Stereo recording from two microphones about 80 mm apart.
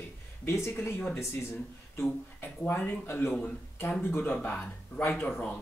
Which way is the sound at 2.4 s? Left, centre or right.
Left.